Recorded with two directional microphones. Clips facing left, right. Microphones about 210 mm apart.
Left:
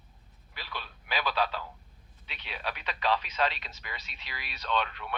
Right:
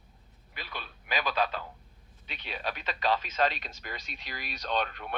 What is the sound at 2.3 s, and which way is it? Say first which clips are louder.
Speech: right 2 dB; 45° right (ahead or behind).